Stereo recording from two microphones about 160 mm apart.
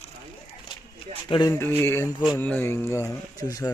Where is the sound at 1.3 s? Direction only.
30° left (ahead or behind).